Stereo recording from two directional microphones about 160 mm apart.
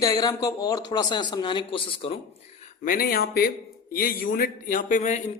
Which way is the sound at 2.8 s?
70° left (ahead or behind).